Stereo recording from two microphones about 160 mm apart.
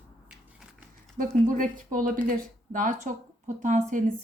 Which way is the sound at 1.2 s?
60° right (ahead or behind).